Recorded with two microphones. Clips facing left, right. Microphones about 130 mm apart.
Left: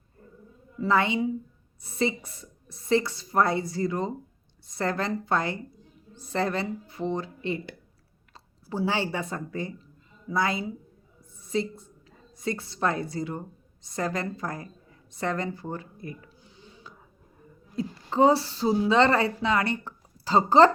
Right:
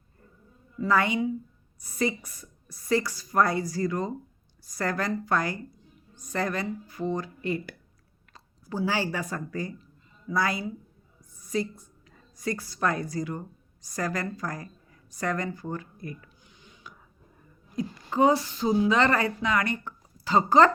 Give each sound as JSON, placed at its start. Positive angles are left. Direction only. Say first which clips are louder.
{"t": 0.8, "sound": "a woman's voice", "louder": "even", "side_deg": 25}
{"t": 11.2, "sound": "a sound", "louder": "left 1 dB", "side_deg": 25}
{"t": 12.4, "sound": "a woman's voice", "louder": "even", "side_deg": 25}